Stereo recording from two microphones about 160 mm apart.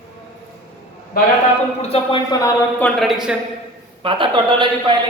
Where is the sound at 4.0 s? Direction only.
30° right (ahead or behind).